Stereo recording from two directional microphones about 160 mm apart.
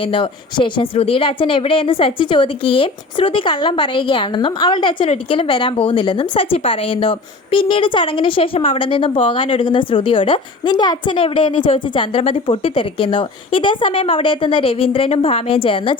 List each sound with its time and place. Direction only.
0.0 s speech: 35° left (ahead or behind)